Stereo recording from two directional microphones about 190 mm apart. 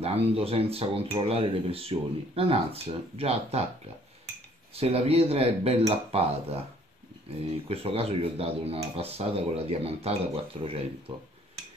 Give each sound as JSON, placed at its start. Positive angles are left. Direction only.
{"t": 0.0, "sound": "speech", "side_deg": -30}
{"t": 4.7, "sound": "speech", "side_deg": -30}
{"t": 7.6, "sound": "speech", "side_deg": -30}